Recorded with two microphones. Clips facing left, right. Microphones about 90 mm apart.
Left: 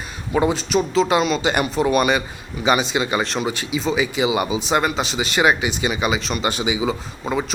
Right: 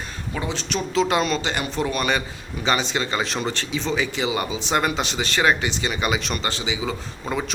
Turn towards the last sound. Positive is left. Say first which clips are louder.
# left 3 dB
turn(degrees=5)  # may be behind; listen again after turning